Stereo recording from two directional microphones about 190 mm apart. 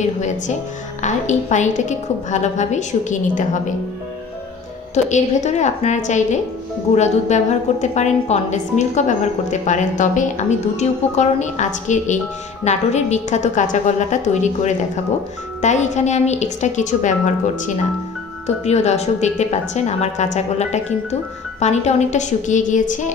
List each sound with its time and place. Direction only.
1.0 s a woman's voice: 40° left (ahead or behind)
5.1 s a woman's voice: 40° left (ahead or behind)
18.6 s a woman's voice: 35° left (ahead or behind)